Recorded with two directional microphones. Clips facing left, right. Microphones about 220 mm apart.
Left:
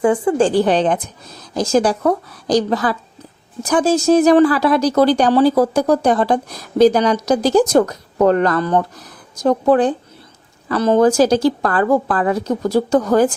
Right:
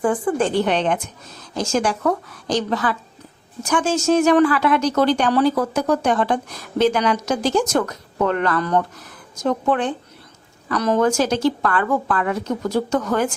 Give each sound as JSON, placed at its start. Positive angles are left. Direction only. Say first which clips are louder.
{"t": 0.0, "sound": "speech", "louder": "left 5 dB", "side_deg": 25}